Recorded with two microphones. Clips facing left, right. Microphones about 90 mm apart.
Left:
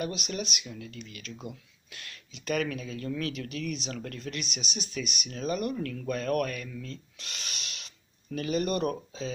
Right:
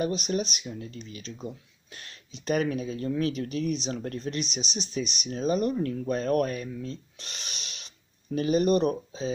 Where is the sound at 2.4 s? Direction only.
35° right (ahead or behind).